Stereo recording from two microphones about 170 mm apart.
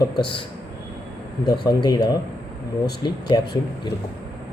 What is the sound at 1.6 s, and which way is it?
Speech, 25° left (ahead or behind).